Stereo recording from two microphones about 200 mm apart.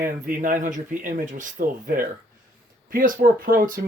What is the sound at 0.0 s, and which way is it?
Speech, 45° right (ahead or behind).